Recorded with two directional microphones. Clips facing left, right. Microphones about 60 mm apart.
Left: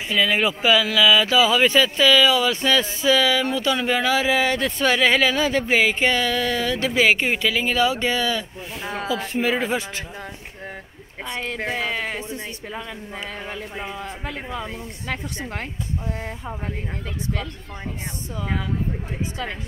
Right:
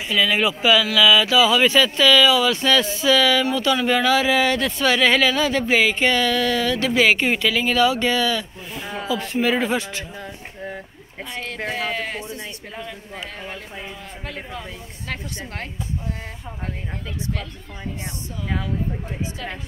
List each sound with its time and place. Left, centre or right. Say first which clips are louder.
0.1 s speech: right 1 dB; left
11.6 s speech: right 1 dB; left
14.2 s speech: even; centre